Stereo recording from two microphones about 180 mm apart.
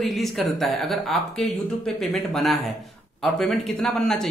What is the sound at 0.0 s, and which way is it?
Speech, centre (ahead or behind).